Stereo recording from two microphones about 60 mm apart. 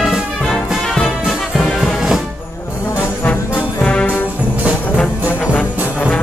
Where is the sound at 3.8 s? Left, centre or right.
Centre.